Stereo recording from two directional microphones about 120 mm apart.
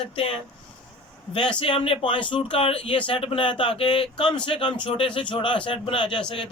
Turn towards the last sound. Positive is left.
turn(degrees=45)  # may be behind; listen again after turning